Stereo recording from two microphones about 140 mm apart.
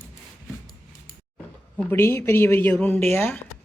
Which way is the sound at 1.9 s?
15° left (ahead or behind).